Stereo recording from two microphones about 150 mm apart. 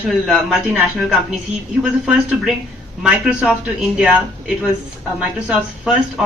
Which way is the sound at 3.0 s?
5° right (ahead or behind).